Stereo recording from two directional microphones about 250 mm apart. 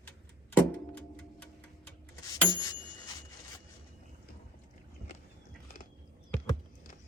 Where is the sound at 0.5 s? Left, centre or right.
Centre.